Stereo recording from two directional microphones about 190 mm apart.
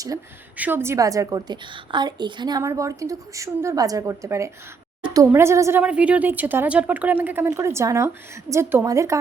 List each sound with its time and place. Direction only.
0.1 s speech: 15° right (ahead or behind)